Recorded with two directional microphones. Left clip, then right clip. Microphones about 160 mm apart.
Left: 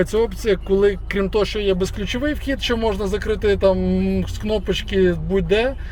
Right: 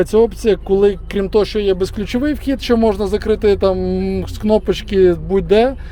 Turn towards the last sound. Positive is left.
turn(degrees=-35)  # may be behind; listen again after turning